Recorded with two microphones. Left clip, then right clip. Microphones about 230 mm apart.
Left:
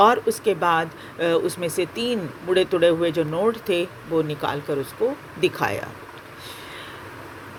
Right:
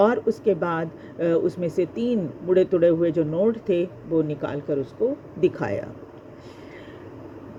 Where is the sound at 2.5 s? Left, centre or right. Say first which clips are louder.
Even; centre.